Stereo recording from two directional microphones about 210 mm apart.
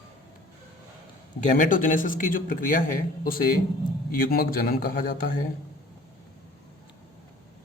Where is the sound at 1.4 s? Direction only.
35° left (ahead or behind).